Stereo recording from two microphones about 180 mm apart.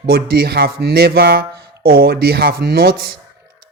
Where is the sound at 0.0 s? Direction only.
60° right (ahead or behind).